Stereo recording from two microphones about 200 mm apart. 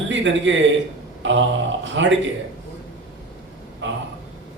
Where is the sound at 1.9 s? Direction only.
65° right (ahead or behind).